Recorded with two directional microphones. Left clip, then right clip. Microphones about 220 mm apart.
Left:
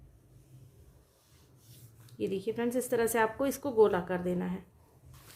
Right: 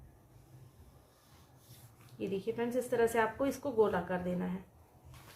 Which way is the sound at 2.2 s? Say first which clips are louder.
Left 3 dB; 45° left (ahead or behind).